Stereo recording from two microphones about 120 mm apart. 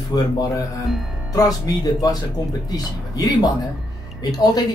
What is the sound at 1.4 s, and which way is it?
Speech, 30° left (ahead or behind).